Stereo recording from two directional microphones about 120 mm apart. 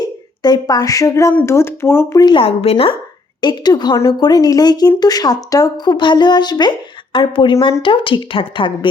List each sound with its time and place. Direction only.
0.4 s a woman's voice: 35° left (ahead or behind)
2.1 s speech: 35° left (ahead or behind)
2.4 s a woman's voice: 55° left (ahead or behind)
3.4 s speech: 35° left (ahead or behind)